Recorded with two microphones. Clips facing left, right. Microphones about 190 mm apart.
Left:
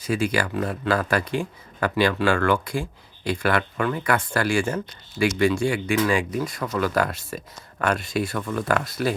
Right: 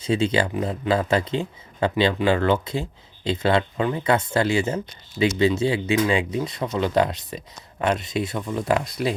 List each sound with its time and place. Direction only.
0.0 s speech: 25° right (ahead or behind)